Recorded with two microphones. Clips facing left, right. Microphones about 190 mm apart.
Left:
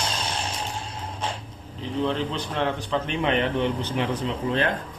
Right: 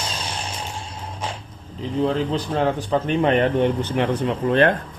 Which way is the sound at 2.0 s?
35° right (ahead or behind).